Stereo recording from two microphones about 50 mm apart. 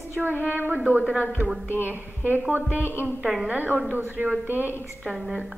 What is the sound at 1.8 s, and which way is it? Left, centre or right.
Speech, right.